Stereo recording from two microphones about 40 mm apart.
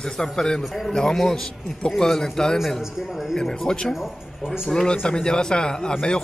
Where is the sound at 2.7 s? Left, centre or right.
Centre.